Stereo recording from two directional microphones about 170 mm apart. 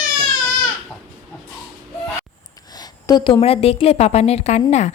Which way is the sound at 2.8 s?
25° left (ahead or behind).